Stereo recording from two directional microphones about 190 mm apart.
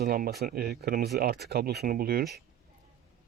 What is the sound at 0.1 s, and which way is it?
Speech, 55° right (ahead or behind).